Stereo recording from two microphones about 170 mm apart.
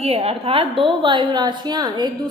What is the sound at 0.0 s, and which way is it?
A woman's voice, 35° right (ahead or behind).